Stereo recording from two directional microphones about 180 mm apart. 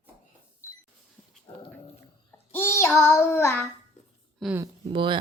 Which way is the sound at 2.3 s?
10° left (ahead or behind).